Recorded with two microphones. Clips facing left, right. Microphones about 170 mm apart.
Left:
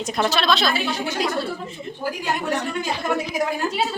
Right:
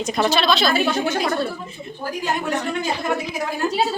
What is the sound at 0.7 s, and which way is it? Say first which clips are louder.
Speech: right 5 dB; 50° right (ahead or behind).